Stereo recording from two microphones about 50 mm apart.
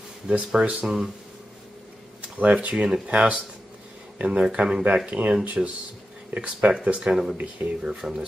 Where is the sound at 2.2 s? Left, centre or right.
Right.